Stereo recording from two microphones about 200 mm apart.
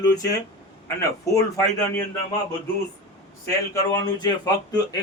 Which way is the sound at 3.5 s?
20° left (ahead or behind).